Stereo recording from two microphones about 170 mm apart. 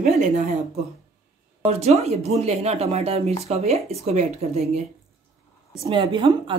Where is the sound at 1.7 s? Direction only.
40° right (ahead or behind).